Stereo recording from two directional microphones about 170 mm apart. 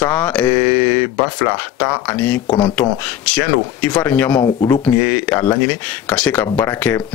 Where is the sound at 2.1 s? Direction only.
10° left (ahead or behind).